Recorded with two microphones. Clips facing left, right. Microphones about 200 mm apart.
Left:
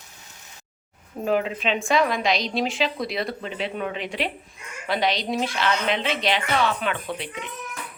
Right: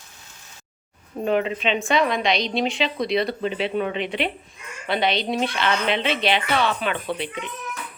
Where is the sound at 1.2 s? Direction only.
5° left (ahead or behind).